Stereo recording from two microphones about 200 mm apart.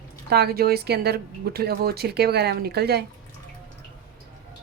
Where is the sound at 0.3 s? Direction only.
50° right (ahead or behind).